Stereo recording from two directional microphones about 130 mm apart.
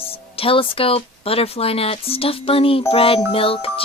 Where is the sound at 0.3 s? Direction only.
45° left (ahead or behind).